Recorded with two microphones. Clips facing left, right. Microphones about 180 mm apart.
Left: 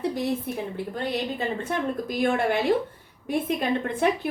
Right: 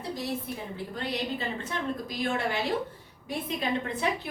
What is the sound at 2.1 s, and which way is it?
Speech, 55° left (ahead or behind).